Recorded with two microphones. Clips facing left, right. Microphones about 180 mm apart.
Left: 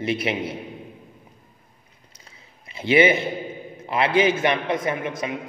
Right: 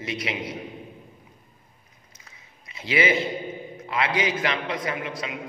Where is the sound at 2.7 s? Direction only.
25° left (ahead or behind).